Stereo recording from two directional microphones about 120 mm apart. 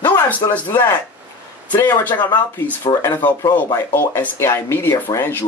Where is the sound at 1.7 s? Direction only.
15° left (ahead or behind).